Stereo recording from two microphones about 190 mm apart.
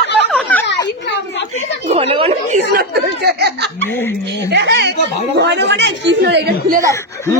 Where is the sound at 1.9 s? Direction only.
30° right (ahead or behind).